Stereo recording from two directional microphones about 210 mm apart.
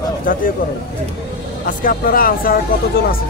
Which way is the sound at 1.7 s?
40° left (ahead or behind).